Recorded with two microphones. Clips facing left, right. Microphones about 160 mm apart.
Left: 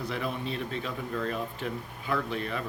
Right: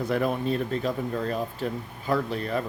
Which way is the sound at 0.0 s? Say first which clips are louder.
Right 7 dB; 50° right (ahead or behind).